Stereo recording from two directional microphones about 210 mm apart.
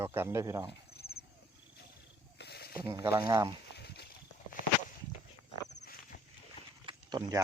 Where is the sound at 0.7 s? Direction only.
50° left (ahead or behind).